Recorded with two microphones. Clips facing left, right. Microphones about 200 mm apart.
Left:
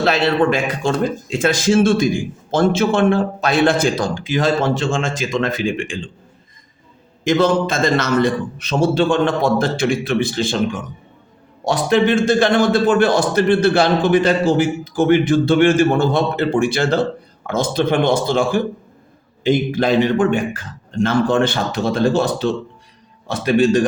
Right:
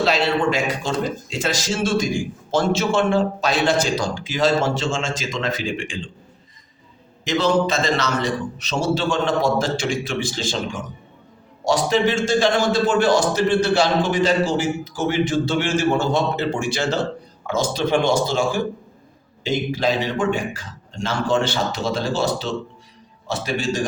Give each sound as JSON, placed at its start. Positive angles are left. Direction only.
{"t": 0.0, "sound": "a man's voice", "side_deg": 55}
{"t": 7.3, "sound": "a man's voice", "side_deg": 50}